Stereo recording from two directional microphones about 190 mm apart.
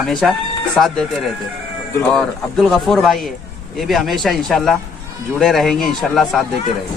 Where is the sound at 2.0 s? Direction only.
5° left (ahead or behind).